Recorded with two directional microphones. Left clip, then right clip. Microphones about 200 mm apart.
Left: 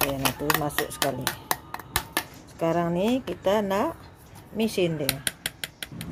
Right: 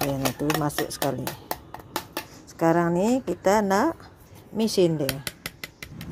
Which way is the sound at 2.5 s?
30° right (ahead or behind).